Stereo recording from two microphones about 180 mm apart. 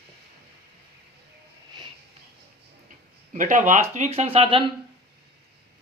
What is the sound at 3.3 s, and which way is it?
Speech, 45° right (ahead or behind).